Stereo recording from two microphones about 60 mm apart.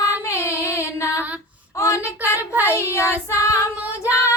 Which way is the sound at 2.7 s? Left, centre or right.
Left.